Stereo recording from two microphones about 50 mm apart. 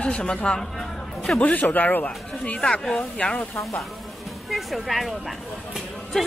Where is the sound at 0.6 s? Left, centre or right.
Centre.